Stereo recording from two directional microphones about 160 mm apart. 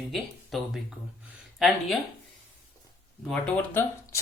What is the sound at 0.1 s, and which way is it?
Speech, centre (ahead or behind).